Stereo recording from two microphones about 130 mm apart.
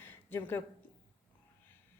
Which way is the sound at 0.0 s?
15° left (ahead or behind).